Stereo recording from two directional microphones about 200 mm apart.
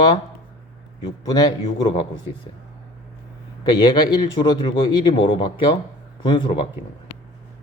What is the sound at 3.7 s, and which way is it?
Speech, 20° left (ahead or behind).